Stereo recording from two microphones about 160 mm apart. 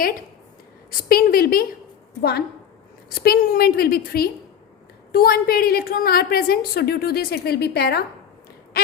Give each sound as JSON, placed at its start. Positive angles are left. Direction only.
{"t": 0.9, "sound": "a woman's voice", "side_deg": 65}
{"t": 3.2, "sound": "a woman's voice", "side_deg": 65}
{"t": 8.7, "sound": "a sound", "side_deg": 70}